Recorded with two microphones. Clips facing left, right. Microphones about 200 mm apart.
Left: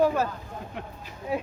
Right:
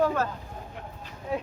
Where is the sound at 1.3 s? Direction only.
5° left (ahead or behind).